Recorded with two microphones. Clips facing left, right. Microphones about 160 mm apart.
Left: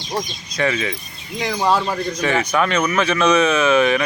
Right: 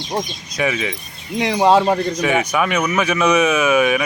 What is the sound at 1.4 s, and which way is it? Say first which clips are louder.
Speech: right 5 dB; 25° right (ahead or behind).